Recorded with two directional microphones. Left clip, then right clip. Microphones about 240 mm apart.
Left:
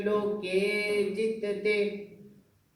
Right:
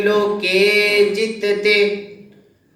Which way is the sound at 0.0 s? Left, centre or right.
Right.